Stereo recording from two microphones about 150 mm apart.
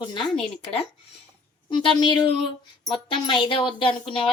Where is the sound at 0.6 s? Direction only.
40° left (ahead or behind).